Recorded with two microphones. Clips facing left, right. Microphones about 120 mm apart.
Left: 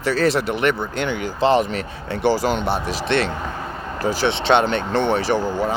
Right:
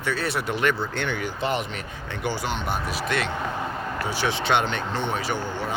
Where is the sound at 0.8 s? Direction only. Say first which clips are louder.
Left 4 dB; 20° left (ahead or behind).